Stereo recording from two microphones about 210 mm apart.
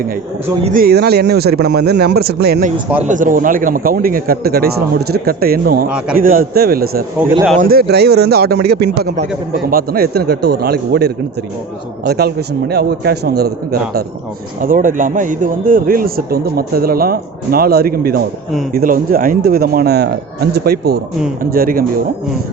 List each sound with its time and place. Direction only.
0.6 s speech: 40° right (ahead or behind)
14.6 s speech: 40° right (ahead or behind)